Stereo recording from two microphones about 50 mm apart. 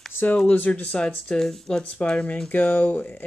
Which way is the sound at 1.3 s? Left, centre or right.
Centre.